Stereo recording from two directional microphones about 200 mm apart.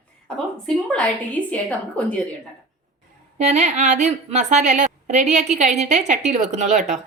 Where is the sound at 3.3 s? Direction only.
35° right (ahead or behind).